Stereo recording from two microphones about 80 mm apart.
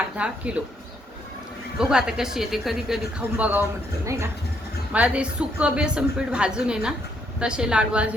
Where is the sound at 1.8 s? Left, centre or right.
Centre.